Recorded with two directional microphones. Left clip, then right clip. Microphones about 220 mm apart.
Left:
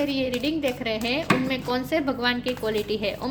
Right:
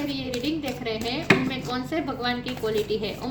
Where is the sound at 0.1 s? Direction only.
50° left (ahead or behind).